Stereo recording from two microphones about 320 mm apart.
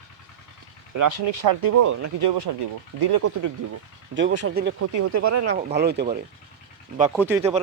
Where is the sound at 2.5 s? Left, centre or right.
Right.